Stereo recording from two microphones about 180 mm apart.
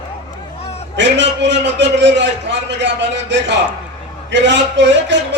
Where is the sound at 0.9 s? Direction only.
85° right.